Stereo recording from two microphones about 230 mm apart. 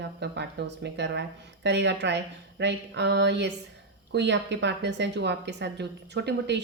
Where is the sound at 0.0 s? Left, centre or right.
Right.